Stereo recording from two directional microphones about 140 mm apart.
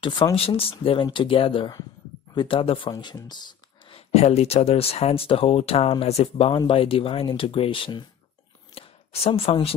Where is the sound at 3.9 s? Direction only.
45° left (ahead or behind).